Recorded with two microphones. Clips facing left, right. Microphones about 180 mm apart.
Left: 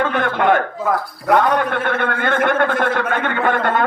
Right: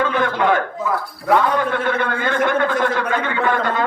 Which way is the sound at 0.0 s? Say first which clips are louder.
Left 1 dB; 55° left (ahead or behind).